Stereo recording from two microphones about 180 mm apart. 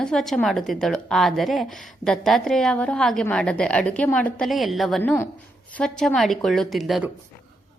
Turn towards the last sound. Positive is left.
turn(degrees=0)  # may be behind; listen again after turning